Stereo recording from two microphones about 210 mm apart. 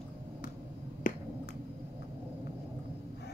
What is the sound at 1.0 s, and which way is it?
Finger snapping, 40° left (ahead or behind).